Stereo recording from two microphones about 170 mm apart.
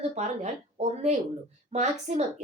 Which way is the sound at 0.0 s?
40° right (ahead or behind).